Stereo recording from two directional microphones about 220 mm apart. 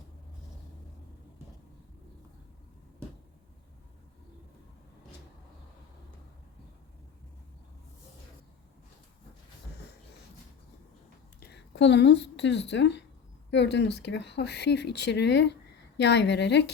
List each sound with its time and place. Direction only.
11.3 s a woman's voice: 50° left (ahead or behind)